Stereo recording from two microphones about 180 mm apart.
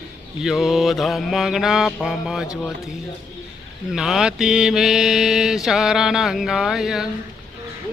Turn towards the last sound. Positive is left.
turn(degrees=0)  # may be behind; listen again after turning